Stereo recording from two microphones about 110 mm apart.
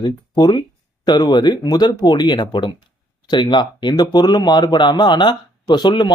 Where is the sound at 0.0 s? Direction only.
40° left (ahead or behind).